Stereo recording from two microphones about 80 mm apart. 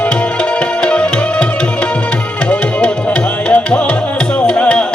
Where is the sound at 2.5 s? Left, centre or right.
Centre.